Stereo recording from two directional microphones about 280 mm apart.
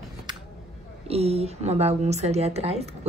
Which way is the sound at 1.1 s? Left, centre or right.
Right.